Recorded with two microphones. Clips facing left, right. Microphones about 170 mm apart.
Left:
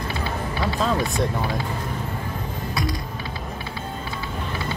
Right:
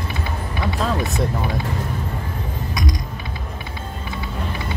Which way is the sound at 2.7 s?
20° right (ahead or behind).